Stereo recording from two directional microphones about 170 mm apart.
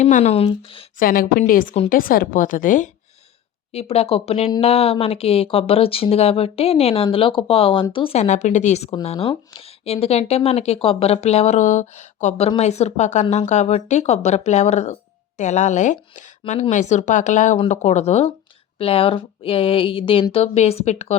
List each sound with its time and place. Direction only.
0.0 s speech: 40° left (ahead or behind)
0.9 s speech: 60° left (ahead or behind)
3.7 s speech: 35° left (ahead or behind)